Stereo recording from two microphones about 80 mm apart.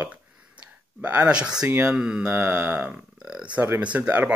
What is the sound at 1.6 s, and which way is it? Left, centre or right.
Speech, right.